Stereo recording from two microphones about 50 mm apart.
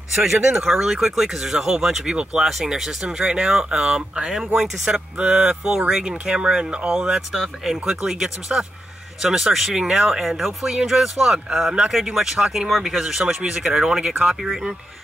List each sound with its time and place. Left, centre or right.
0.1 s speech: centre
7.3 s speech: centre
13.2 s speech: centre
14.4 s speech: centre